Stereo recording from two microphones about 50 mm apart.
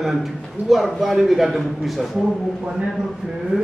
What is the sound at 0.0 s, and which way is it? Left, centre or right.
A man's voice, centre.